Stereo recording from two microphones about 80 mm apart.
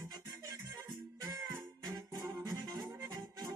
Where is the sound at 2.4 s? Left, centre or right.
Right.